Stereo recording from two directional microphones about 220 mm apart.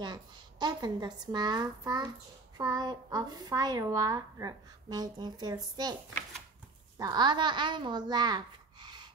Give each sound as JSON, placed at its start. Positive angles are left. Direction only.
{"t": 0.0, "sound": "a woman's voice", "side_deg": -20}
{"t": 7.0, "sound": "a woman's voice", "side_deg": -20}